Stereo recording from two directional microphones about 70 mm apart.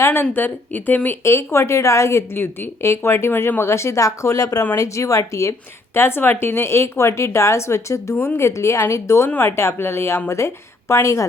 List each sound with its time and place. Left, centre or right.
0.0 s speech: left
1.2 s speech: left